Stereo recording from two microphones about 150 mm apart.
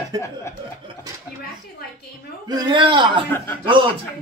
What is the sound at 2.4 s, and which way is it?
Speech, 30° right (ahead or behind).